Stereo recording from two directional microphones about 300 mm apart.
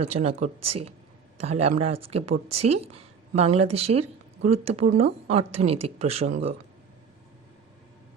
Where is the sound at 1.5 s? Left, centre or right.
Centre.